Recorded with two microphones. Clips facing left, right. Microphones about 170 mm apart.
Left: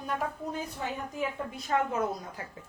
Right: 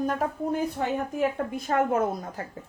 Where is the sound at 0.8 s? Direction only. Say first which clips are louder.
Right 8 dB; 55° right (ahead or behind).